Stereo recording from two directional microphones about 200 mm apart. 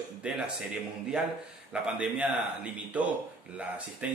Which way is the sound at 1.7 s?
5° right (ahead or behind).